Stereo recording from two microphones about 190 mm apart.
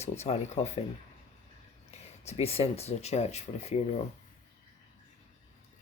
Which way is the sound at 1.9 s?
35° left (ahead or behind).